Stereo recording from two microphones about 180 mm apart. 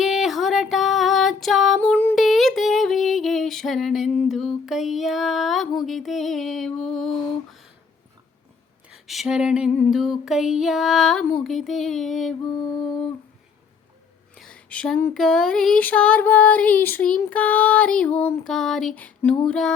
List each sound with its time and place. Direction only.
0.0 s music: centre (ahead or behind)
2.2 s female singing: centre (ahead or behind)
8.9 s a sound: centre (ahead or behind)
9.7 s music: 5° left (ahead or behind)
12.4 s music: 20° left (ahead or behind)
14.3 s a sound: 5° left (ahead or behind)
15.1 s female singing: centre (ahead or behind)
19.5 s music: 5° left (ahead or behind)